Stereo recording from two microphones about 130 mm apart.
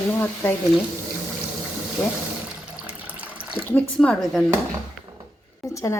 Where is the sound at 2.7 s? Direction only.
10° right (ahead or behind).